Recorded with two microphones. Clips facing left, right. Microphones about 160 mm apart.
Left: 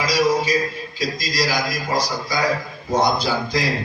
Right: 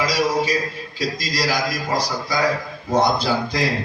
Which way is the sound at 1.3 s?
60° right (ahead or behind).